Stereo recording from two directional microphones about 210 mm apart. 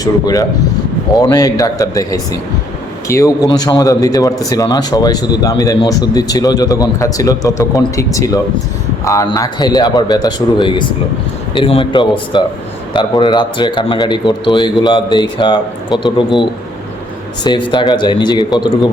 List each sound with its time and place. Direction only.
0.0 s a man's voice: 15° left (ahead or behind)